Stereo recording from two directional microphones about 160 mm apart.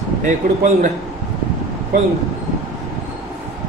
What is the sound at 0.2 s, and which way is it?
Speech, 55° right (ahead or behind).